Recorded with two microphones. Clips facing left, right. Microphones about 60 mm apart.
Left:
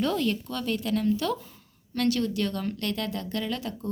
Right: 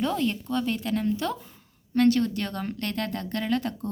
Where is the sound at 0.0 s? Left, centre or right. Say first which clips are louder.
Even; right.